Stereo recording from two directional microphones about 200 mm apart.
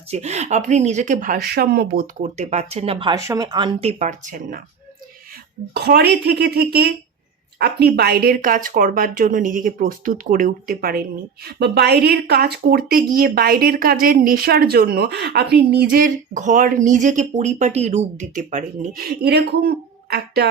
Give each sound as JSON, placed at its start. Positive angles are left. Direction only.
{"t": 0.1, "sound": "speech", "side_deg": -35}
{"t": 5.7, "sound": "speech", "side_deg": -55}